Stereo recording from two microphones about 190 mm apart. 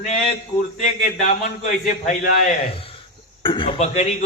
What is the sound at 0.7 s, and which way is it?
Speech, 40° left (ahead or behind).